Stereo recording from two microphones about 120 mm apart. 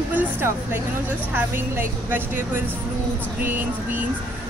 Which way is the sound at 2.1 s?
15° right (ahead or behind).